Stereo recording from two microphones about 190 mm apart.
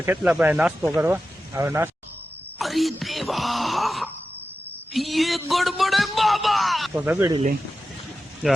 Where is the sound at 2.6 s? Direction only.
Centre (ahead or behind).